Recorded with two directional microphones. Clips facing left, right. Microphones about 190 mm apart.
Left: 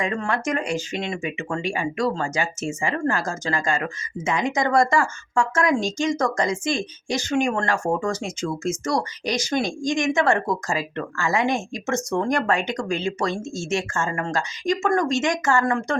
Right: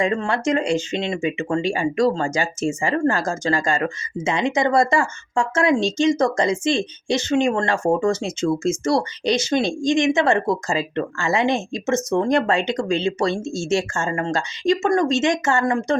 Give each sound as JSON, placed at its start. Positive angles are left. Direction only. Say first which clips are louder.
{"t": 0.0, "sound": "speech", "louder": "right 4 dB", "side_deg": -30}